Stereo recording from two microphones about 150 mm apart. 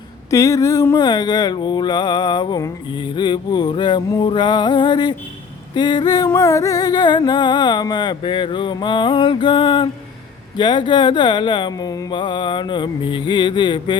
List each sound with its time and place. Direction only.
0.3 s mantra: 20° left (ahead or behind)